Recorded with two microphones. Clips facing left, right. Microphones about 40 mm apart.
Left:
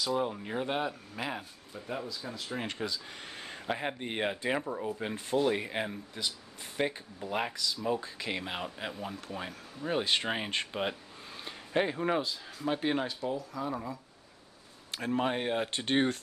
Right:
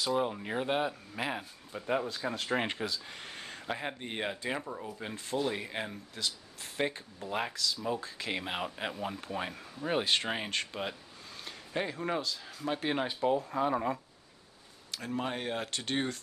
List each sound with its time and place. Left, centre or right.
0.1 s speech: centre
2.3 s speech: right
2.8 s speech: centre
8.4 s speech: centre
10.0 s speech: centre
10.5 s a man's voice: centre
12.5 s speech: centre
13.2 s speech: right
14.9 s speech: left